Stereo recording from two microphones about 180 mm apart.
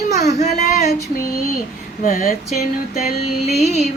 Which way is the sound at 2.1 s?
50° left (ahead or behind).